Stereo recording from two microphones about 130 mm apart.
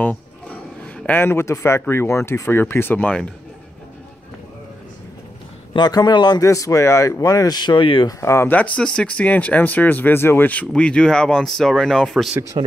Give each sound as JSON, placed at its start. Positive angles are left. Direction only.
{"t": 0.9, "sound": "speech", "side_deg": 15}
{"t": 5.7, "sound": "a man's voice", "side_deg": 35}
{"t": 8.2, "sound": "speech", "side_deg": 20}
{"t": 12.6, "sound": "speech", "side_deg": -45}